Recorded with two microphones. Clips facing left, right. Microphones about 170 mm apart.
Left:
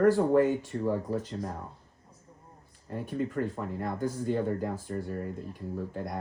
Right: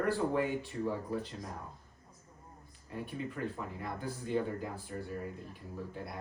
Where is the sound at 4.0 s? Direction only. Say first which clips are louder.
Left 4 dB; 45° left (ahead or behind).